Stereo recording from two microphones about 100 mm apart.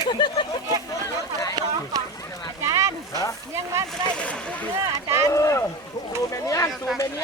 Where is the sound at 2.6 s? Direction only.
30° right (ahead or behind).